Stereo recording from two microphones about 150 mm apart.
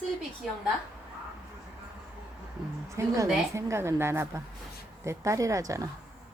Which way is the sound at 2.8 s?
20° right (ahead or behind).